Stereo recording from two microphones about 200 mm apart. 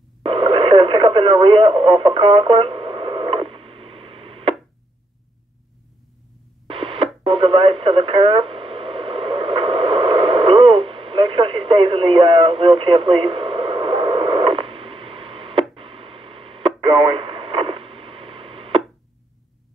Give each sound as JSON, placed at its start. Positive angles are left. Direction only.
{"t": 0.2, "sound": "radio", "side_deg": -25}
{"t": 6.7, "sound": "radio", "side_deg": -25}